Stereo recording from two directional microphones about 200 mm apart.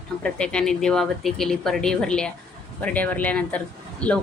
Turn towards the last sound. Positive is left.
turn(degrees=5)  # may be behind; listen again after turning